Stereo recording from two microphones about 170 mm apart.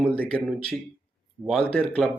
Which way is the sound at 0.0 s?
10° left (ahead or behind).